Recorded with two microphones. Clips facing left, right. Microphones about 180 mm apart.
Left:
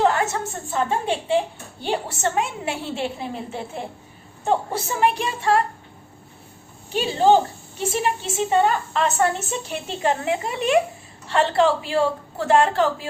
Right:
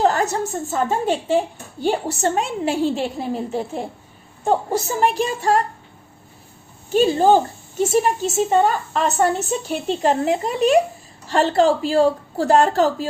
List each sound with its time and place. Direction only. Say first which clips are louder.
0.0 s a woman's voice: right 2 dB; 35° right (ahead or behind)
6.9 s a woman's voice: right 3 dB; 45° right (ahead or behind)